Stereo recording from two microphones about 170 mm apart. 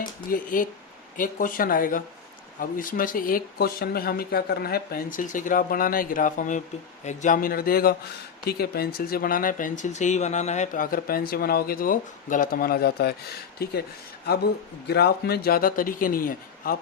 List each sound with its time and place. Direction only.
0.0 s speech: 55° left (ahead or behind)